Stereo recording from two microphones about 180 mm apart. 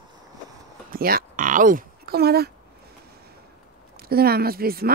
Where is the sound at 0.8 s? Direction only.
55° right (ahead or behind).